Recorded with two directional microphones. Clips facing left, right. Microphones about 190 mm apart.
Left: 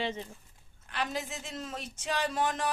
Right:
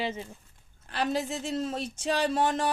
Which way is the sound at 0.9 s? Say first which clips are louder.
Right 6 dB; 35° right (ahead or behind).